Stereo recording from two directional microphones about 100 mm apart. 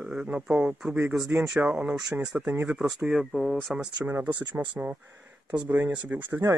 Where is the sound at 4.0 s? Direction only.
20° right (ahead or behind).